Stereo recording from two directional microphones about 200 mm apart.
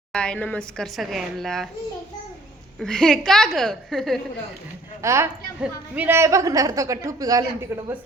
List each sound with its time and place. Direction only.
0.1 s a woman's voice: 5° left (ahead or behind)
2.7 s a woman's voice: 5° left (ahead or behind)
5.0 s a woman's voice: 15° right (ahead or behind)